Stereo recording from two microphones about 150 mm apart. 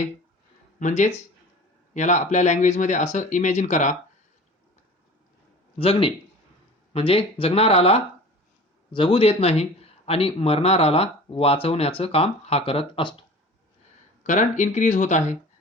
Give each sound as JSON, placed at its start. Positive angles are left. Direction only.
{"t": 0.8, "sound": "speech", "side_deg": 55}
{"t": 5.8, "sound": "speech", "side_deg": 35}
{"t": 14.3, "sound": "speech", "side_deg": 55}